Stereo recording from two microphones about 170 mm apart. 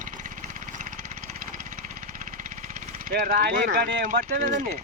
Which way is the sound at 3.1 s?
60° right (ahead or behind).